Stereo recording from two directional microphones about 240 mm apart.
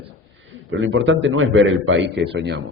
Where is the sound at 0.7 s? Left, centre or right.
Right.